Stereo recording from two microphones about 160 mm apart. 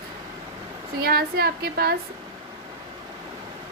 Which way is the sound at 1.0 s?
75° right (ahead or behind).